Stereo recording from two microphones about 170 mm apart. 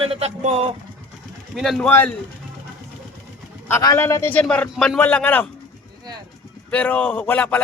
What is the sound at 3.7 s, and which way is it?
A man's voice, 20° left (ahead or behind).